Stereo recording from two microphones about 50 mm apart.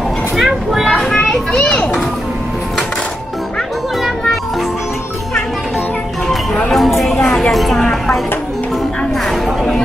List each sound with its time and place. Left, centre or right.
0.4 s children playing: centre
1.6 s children playing: left
6.2 s music: centre
6.7 s a sound: centre
7.2 s a sound: centre
9.3 s chatter: centre